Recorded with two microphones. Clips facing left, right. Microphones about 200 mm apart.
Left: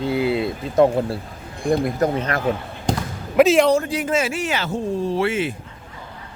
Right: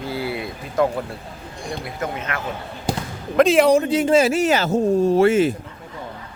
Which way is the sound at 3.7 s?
20° right (ahead or behind).